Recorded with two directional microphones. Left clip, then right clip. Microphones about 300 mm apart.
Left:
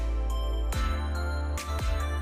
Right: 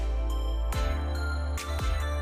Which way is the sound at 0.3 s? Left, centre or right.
Centre.